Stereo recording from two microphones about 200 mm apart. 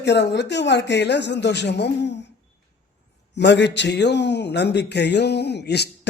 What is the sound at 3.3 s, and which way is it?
A man's voice, 60° left (ahead or behind).